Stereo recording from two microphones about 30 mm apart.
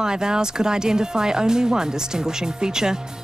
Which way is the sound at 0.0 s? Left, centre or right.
Right.